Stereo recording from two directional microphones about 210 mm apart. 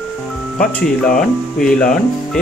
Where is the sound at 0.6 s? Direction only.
5° left (ahead or behind).